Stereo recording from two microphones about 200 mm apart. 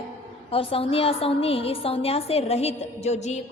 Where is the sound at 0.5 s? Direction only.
30° left (ahead or behind).